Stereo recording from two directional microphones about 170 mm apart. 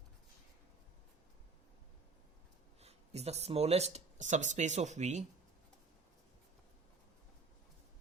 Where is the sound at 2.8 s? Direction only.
40° right (ahead or behind).